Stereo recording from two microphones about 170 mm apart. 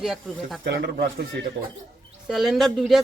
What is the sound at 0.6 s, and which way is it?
Speech, 70° right (ahead or behind).